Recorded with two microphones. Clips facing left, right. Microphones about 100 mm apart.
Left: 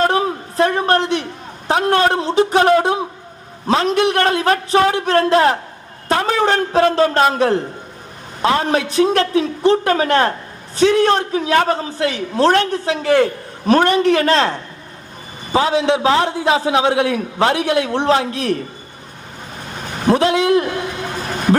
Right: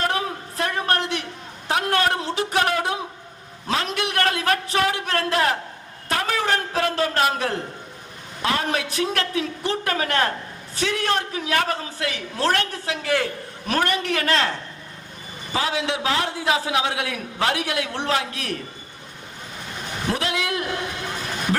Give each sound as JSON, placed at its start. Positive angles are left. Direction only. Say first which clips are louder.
{"t": 0.0, "sound": "a sound", "louder": "left 8 dB", "side_deg": 30}
{"t": 1.6, "sound": "a man's voice", "louder": "left 7 dB", "side_deg": 30}
{"t": 15.5, "sound": "a man's voice", "louder": "left 9 dB", "side_deg": 30}
{"t": 20.1, "sound": "a man's voice", "louder": "left 12 dB", "side_deg": 30}